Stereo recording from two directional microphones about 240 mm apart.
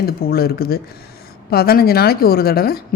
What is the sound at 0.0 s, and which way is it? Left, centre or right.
A woman's voice, left.